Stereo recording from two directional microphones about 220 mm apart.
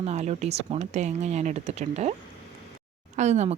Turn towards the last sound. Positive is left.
turn(degrees=-30)  # may be behind; listen again after turning